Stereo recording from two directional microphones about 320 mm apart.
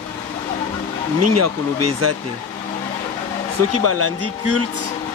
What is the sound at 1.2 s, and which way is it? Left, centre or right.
Speech, right.